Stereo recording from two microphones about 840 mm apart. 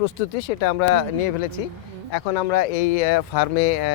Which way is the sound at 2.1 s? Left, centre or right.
Left.